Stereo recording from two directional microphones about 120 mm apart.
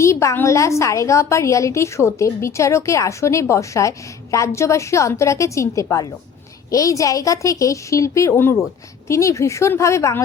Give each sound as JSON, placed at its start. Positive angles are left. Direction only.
{"t": 0.0, "sound": "a woman's voice", "side_deg": 25}